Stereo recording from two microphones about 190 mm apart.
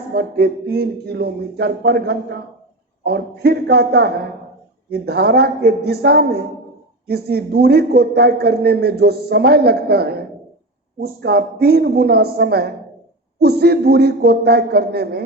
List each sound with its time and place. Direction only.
0.1 s a man's voice: 55° right (ahead or behind)